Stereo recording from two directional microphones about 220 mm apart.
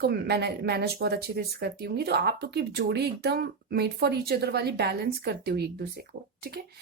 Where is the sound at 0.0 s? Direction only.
50° right (ahead or behind).